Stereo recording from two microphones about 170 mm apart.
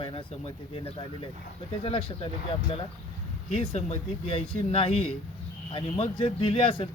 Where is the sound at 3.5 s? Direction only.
35° left (ahead or behind).